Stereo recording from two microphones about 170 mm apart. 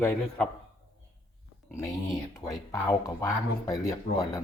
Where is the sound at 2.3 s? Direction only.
15° left (ahead or behind).